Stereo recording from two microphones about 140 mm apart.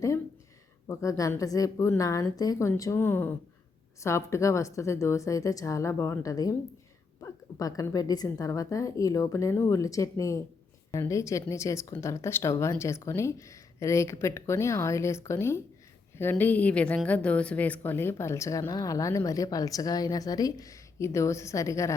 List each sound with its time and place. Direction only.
0.9 s a woman's voice: 25° left (ahead or behind)